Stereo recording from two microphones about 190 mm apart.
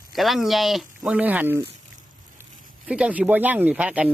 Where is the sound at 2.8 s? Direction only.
5° right (ahead or behind).